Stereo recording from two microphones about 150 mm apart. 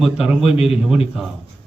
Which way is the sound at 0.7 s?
40° left (ahead or behind).